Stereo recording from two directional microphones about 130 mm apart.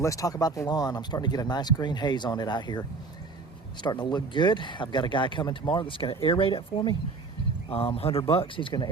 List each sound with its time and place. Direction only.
0.0 s speech: 25° left (ahead or behind)